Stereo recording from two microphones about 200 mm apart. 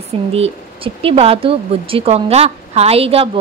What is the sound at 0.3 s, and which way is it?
Speech, 30° right (ahead or behind).